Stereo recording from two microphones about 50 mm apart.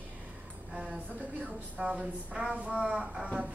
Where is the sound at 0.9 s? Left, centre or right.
Right.